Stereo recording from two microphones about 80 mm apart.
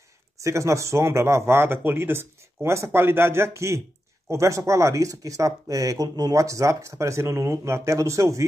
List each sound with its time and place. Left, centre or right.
0.4 s speech: right